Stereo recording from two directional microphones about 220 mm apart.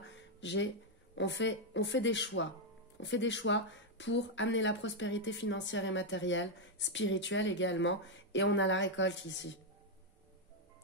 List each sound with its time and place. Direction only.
0.4 s speech: 55° left (ahead or behind)